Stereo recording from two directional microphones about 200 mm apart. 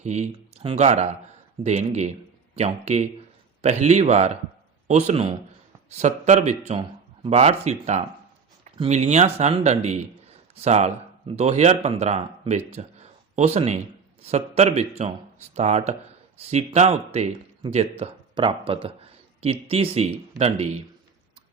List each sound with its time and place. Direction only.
0.0 s speech: 35° right (ahead or behind)